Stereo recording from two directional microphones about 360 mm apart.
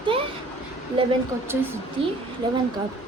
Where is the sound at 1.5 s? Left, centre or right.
Centre.